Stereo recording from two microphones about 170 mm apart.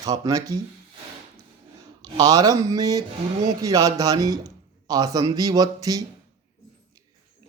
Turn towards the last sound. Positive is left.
turn(degrees=-20)  # may be behind; listen again after turning